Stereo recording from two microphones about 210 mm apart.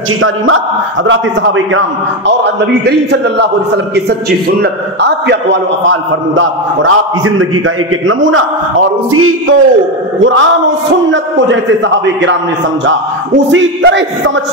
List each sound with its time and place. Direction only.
1.0 s a man's voice: 65° right (ahead or behind)
9.1 s a sound: 80° right
11.1 s a man's voice: 60° right (ahead or behind)
13.5 s a man's voice: 60° right (ahead or behind)